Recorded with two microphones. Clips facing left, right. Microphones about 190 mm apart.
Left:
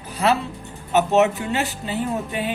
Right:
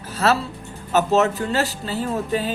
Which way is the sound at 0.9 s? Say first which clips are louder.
Left 1 dB; 20° left (ahead or behind).